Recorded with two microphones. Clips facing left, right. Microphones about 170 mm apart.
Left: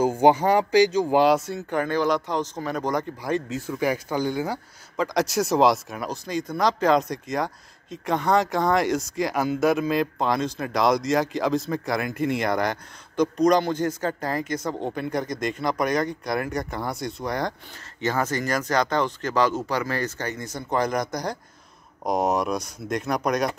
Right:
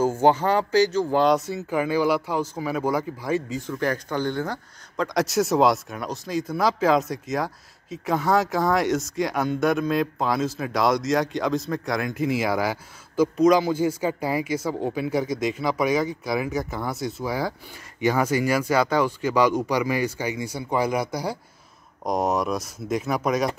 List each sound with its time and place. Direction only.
0.0 s speech: 15° left (ahead or behind)
1.3 s speech: centre (ahead or behind)